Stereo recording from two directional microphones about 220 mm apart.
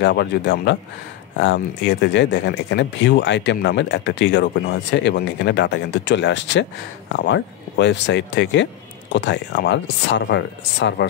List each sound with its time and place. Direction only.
0.0 s speech: 50° left (ahead or behind)